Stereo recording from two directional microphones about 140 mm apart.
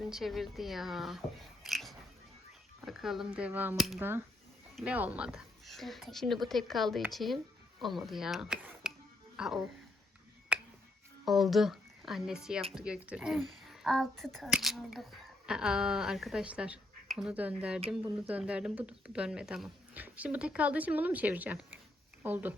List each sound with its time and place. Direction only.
0.1 s speech: centre (ahead or behind)
3.8 s speech: centre (ahead or behind)
4.0 s speech: 15° right (ahead or behind)
4.7 s speech: 5° right (ahead or behind)
10.5 s tick: 10° right (ahead or behind)
11.3 s speech: centre (ahead or behind)